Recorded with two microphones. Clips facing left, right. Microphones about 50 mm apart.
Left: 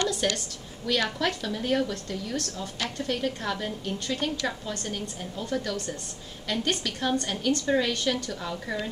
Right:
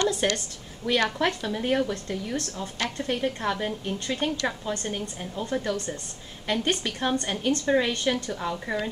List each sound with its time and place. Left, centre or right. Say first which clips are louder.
0.0 s a sound: right 2 dB; right
0.8 s a woman's voice: right 3 dB; right
5.4 s a woman's voice: right 2 dB; right